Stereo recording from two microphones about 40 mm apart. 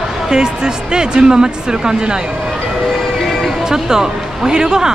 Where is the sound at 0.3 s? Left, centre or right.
Centre.